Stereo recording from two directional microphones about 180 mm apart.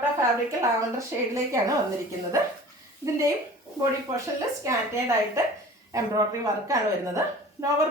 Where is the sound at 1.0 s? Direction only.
15° right (ahead or behind).